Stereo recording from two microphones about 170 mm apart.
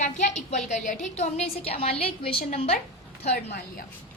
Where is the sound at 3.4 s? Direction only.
60° left (ahead or behind).